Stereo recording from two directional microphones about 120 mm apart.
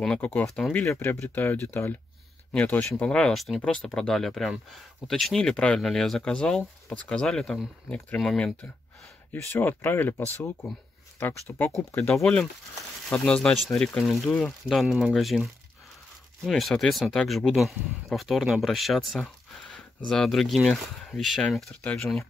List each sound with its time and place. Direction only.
0.0 s speech: 10° left (ahead or behind)
9.3 s speech: 15° left (ahead or behind); by 15.4 s centre (ahead or behind)
16.4 s speech: centre (ahead or behind)